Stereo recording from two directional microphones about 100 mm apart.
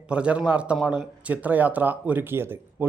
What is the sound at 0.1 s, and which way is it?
A man's voice, 10° right (ahead or behind).